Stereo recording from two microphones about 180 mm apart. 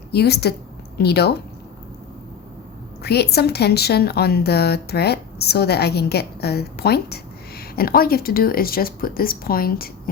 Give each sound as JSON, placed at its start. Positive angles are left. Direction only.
{"t": 0.1, "sound": "a woman's voice", "side_deg": 65}
{"t": 3.0, "sound": "a woman's voice", "side_deg": 65}